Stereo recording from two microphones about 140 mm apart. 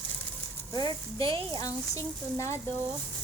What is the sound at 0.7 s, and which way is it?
Speech, 25° left (ahead or behind).